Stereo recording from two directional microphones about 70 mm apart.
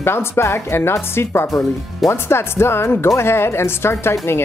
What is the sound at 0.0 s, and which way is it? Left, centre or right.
Speech, left.